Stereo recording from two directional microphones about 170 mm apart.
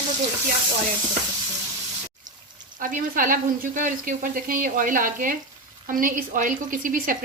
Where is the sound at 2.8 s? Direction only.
50° right (ahead or behind).